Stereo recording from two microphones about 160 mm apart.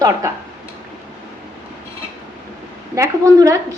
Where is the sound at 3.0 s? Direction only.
20° right (ahead or behind).